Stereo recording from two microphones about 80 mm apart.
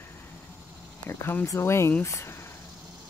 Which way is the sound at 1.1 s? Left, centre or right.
Left.